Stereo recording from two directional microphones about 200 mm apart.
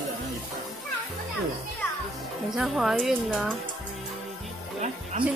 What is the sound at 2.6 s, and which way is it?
Speech, centre (ahead or behind).